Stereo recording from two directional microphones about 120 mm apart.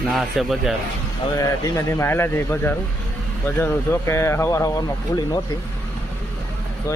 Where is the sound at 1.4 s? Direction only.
30° left (ahead or behind).